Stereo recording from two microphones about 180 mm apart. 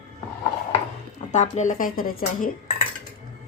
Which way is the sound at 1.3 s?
40° left (ahead or behind).